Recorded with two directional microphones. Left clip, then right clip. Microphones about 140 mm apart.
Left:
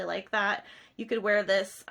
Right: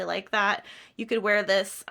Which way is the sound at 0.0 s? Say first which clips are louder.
Right 3 dB; 30° right (ahead or behind).